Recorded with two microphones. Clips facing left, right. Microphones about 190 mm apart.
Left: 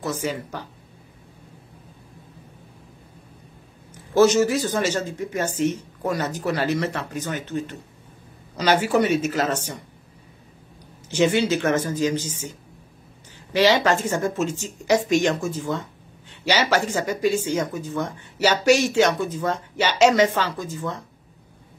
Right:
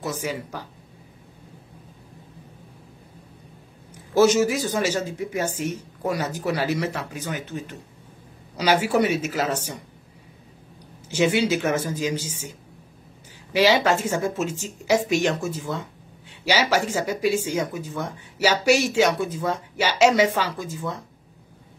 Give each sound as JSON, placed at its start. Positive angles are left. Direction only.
{"t": 0.0, "sound": "speech", "side_deg": -10}
{"t": 4.1, "sound": "speech", "side_deg": -10}
{"t": 11.1, "sound": "speech", "side_deg": -10}
{"t": 13.5, "sound": "speech", "side_deg": -10}